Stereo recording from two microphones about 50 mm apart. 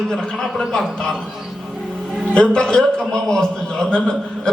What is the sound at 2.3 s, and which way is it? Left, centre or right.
A man's voice, centre.